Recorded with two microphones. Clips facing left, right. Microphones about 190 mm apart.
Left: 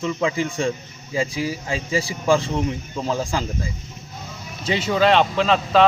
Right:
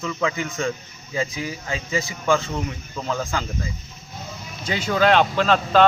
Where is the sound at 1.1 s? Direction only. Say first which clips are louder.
Left 3 dB; 30° left (ahead or behind).